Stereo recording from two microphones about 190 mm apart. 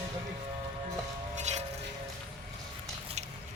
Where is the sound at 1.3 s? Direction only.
35° right (ahead or behind).